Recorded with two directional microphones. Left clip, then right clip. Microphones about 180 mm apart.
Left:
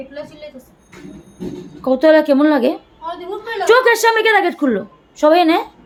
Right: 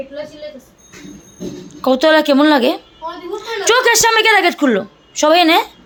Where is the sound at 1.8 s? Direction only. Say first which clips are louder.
Even; 5° right (ahead or behind).